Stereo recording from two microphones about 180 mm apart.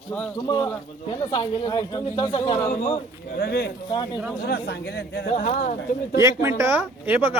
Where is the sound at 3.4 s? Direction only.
65° left (ahead or behind).